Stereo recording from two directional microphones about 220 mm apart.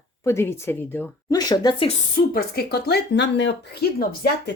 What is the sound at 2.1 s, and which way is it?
Speech, 45° left (ahead or behind).